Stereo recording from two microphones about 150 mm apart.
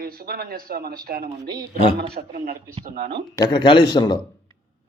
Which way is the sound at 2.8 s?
55° right (ahead or behind).